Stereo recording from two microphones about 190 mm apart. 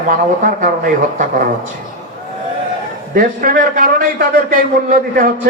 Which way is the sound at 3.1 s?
50° right (ahead or behind).